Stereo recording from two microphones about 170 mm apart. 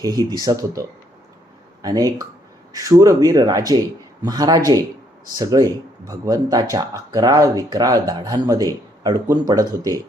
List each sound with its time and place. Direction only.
0.0 s speech: 20° right (ahead or behind)